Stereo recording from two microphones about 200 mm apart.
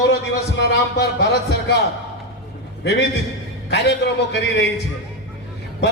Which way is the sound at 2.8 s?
55° left (ahead or behind).